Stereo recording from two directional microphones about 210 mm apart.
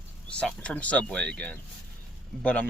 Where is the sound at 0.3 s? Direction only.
5° left (ahead or behind).